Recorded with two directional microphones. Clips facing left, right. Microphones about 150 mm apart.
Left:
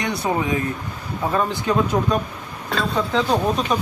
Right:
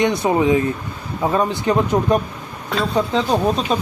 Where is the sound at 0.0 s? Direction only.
20° right (ahead or behind).